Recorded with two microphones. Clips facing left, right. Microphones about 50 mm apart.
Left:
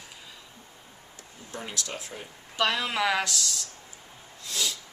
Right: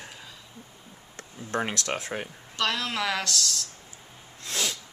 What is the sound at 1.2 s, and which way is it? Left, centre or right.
Speech, right.